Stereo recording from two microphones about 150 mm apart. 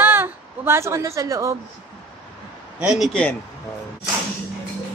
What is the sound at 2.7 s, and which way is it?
Speech, 5° right (ahead or behind).